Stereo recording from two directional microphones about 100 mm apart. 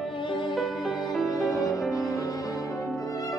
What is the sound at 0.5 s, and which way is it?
Music, centre (ahead or behind).